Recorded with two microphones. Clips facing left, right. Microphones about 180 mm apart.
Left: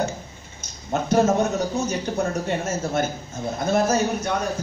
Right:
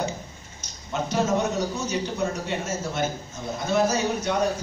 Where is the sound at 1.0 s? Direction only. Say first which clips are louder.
Left 6 dB; 50° left (ahead or behind).